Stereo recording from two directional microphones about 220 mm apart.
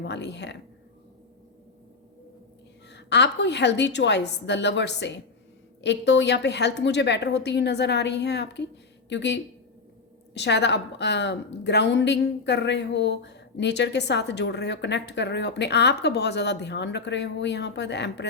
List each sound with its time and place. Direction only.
0.0 s a woman's voice: 50° left (ahead or behind)
2.9 s a woman's voice: 50° left (ahead or behind)